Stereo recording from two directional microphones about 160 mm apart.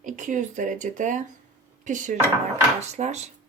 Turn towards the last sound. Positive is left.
turn(degrees=-45)  # may be behind; listen again after turning